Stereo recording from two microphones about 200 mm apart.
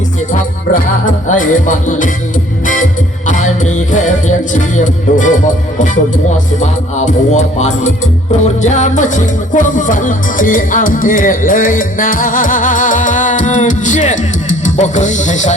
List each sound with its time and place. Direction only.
0.7 s music: 40° left (ahead or behind)
3.2 s music: 35° left (ahead or behind)
6.3 s music: 35° left (ahead or behind)